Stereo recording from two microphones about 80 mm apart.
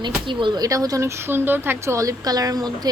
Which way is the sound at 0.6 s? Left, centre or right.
Right.